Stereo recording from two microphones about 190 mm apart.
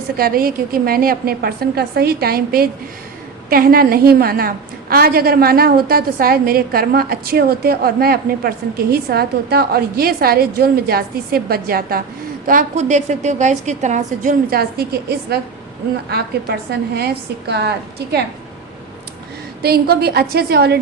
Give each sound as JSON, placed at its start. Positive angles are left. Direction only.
{"t": 0.2, "sound": "a woman's voice", "side_deg": -50}
{"t": 16.0, "sound": "a woman's voice", "side_deg": -60}
{"t": 19.6, "sound": "a woman's voice", "side_deg": -55}